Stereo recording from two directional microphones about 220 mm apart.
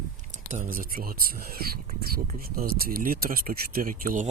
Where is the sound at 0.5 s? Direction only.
40° right (ahead or behind).